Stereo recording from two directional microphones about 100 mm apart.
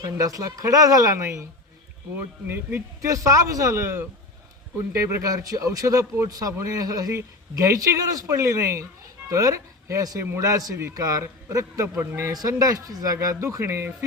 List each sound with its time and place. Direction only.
0.2 s speech: 35° right (ahead or behind)